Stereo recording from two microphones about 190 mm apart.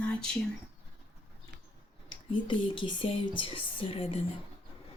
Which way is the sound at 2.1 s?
25° left (ahead or behind).